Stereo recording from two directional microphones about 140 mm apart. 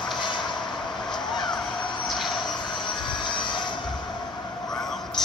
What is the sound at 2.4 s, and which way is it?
Vehicle, 35° left (ahead or behind).